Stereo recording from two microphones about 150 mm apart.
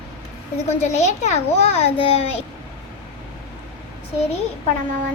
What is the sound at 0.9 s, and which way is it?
Child singing, 50° left (ahead or behind).